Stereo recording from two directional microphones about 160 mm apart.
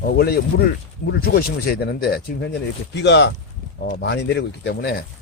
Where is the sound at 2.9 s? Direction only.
90° left.